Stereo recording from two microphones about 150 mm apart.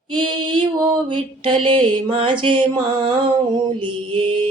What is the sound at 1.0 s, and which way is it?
Mantra, 35° right (ahead or behind).